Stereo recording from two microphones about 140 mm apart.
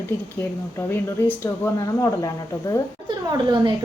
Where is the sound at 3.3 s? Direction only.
35° right (ahead or behind).